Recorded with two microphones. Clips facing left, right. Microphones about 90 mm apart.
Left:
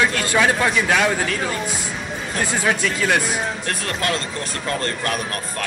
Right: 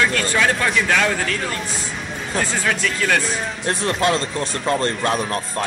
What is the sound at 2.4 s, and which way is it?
Speech, 10° left (ahead or behind).